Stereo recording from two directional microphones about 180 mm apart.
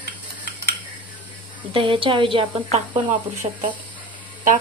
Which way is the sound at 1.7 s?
30° right (ahead or behind).